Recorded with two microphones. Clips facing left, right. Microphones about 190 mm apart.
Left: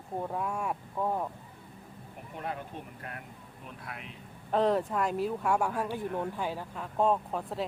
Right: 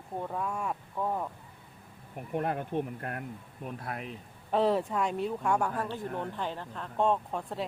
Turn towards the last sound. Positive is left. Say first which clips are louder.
# left 1 dB
turn(degrees=0)  # may be behind; listen again after turning